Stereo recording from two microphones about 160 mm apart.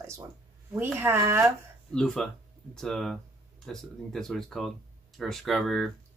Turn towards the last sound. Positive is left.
turn(degrees=0)  # may be behind; listen again after turning